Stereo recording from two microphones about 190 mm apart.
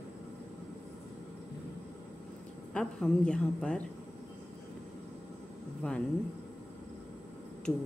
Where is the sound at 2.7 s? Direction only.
5° left (ahead or behind).